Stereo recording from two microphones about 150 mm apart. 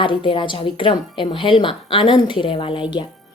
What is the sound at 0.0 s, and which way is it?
A woman's voice, 35° left (ahead or behind).